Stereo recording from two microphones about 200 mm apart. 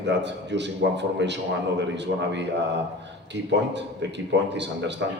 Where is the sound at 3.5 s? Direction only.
60° right (ahead or behind).